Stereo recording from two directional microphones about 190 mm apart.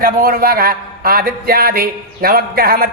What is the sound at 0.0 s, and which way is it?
Speech, 50° right (ahead or behind).